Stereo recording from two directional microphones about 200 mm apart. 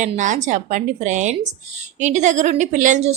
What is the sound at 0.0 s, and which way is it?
A woman's voice, 40° right (ahead or behind).